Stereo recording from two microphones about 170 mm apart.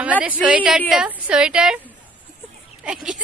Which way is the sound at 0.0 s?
10° right (ahead or behind).